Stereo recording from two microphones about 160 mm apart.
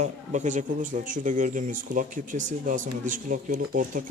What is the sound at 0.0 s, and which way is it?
Speech, 50° right (ahead or behind).